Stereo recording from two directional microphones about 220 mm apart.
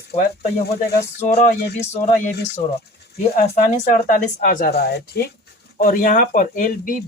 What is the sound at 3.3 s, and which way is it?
Speech, 35° left (ahead or behind).